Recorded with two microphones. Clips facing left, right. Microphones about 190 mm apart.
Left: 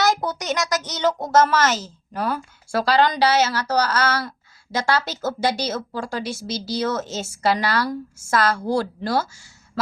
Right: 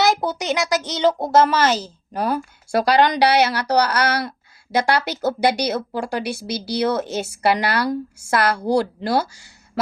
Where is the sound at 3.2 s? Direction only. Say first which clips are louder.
Right 2 dB; 65° right (ahead or behind).